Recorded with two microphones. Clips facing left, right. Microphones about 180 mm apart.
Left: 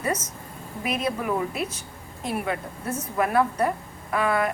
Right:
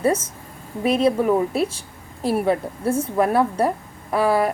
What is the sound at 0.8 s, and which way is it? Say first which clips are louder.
A woman's voice: right 9 dB; 30° right (ahead or behind).